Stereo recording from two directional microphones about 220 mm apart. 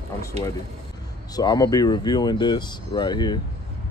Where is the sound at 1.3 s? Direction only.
15° left (ahead or behind).